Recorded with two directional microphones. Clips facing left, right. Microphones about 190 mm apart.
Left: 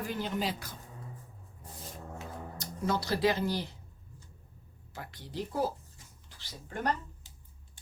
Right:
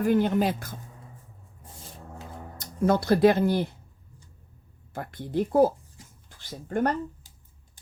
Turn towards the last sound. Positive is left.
turn(degrees=-50)  # may be behind; listen again after turning